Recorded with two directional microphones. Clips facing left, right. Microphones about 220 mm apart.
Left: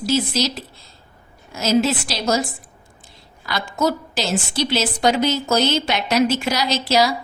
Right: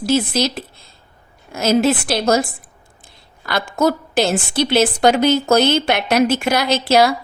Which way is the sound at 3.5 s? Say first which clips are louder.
Right 4 dB; 55° right (ahead or behind).